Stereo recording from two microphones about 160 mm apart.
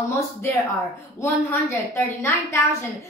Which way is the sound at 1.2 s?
15° left (ahead or behind).